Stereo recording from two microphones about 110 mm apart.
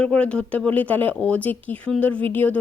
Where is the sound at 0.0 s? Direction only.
10° left (ahead or behind).